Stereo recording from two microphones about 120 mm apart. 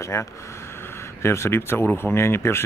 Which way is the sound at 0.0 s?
25° left (ahead or behind).